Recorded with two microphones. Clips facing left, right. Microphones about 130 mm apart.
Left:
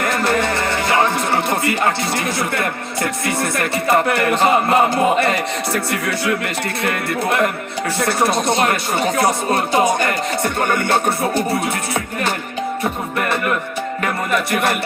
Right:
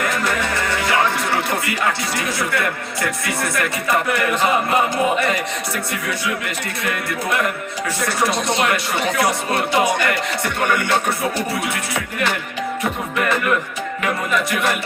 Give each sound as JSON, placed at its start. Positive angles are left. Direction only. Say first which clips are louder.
{"t": 0.2, "sound": "music", "louder": "left 4 dB", "side_deg": 30}
{"t": 5.1, "sound": "speech", "louder": "left 3 dB", "side_deg": 35}
{"t": 6.8, "sound": "speech", "louder": "left 3 dB", "side_deg": 55}
{"t": 14.5, "sound": "speech", "louder": "left 2 dB", "side_deg": 50}